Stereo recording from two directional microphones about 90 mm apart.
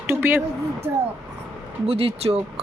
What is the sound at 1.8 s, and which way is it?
Speech, 90° right.